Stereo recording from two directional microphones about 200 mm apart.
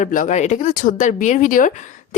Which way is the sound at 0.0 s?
40° left (ahead or behind).